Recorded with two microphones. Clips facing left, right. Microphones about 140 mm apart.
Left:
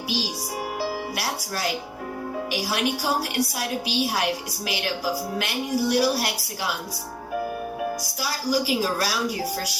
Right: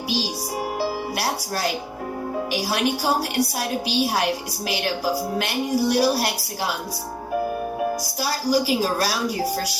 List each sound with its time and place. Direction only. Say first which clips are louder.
0.8 s music: right 3 dB; 35° right (ahead or behind)
2.5 s a woman's voice: right 2 dB; 35° right (ahead or behind)
7.8 s a woman's voice: right 4 dB; 35° right (ahead or behind)